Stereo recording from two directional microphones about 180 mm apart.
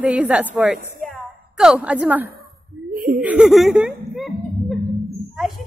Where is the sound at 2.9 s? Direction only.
50° right (ahead or behind).